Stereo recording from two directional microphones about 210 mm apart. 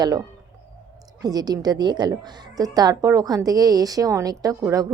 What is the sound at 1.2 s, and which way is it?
A woman's voice, 20° right (ahead or behind).